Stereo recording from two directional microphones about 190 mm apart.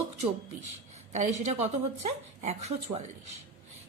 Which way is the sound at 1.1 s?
40° right (ahead or behind).